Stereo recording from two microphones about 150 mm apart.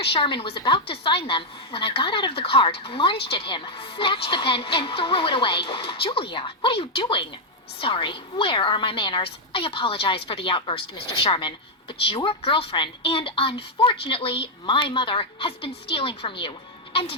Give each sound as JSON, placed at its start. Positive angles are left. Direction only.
{"t": 0.0, "sound": "a woman's voice", "side_deg": 35}